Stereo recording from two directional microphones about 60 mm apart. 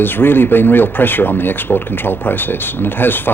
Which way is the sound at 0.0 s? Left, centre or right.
Left.